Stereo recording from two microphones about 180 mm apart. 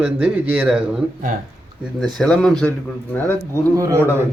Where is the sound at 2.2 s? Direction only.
5° left (ahead or behind).